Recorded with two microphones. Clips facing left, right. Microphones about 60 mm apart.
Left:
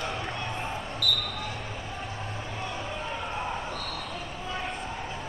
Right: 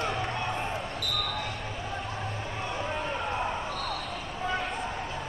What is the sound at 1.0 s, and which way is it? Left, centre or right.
Basketball bounce, right.